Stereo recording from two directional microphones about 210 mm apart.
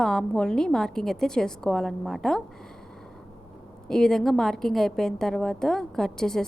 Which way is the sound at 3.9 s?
5° left (ahead or behind).